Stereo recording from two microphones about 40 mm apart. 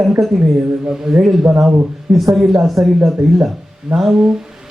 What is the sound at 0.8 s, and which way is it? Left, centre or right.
Speech, right.